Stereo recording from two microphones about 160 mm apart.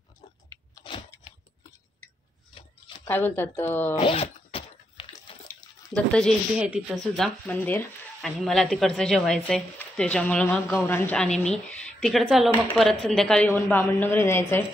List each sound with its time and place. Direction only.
0.5 s chewing: 25° left (ahead or behind)
3.1 s a woman's voice: 10° left (ahead or behind)
4.0 s a sound: 35° left (ahead or behind)
6.6 s speech: 5° right (ahead or behind)
7.4 s a woman's voice: 10° left (ahead or behind)
8.2 s speech: centre (ahead or behind)
13.5 s a woman's voice: 15° left (ahead or behind)